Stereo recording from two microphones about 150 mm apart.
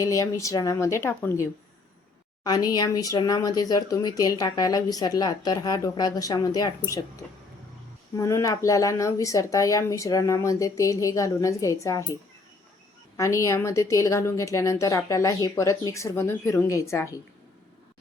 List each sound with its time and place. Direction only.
0.0 s speech: 20° left (ahead or behind)
13.1 s speech: 20° left (ahead or behind)